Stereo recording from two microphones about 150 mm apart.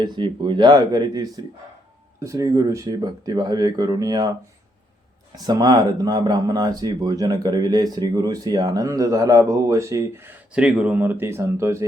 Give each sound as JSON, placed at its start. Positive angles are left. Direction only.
{"t": 0.0, "sound": "speech", "side_deg": -30}
{"t": 5.5, "sound": "speech", "side_deg": -25}